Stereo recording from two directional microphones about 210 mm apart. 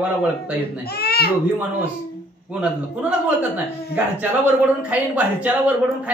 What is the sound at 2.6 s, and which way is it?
A man's voice, 5° right (ahead or behind).